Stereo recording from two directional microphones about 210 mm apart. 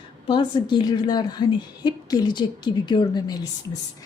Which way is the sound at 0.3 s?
20° left (ahead or behind).